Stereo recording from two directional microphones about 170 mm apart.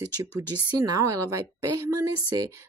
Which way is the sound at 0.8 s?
20° right (ahead or behind).